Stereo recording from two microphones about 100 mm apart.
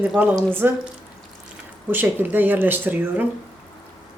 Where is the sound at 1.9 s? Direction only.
20° right (ahead or behind).